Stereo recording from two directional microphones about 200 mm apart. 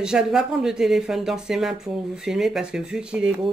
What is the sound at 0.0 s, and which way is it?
Speech, 5° right (ahead or behind).